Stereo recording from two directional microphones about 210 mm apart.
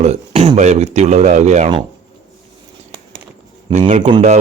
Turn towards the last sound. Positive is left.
turn(degrees=-35)  # may be behind; listen again after turning